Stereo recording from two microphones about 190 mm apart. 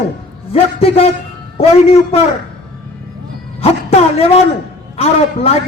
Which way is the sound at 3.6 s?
30° left (ahead or behind).